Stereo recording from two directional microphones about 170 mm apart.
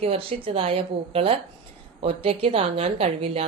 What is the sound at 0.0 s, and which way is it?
Speech, 35° right (ahead or behind).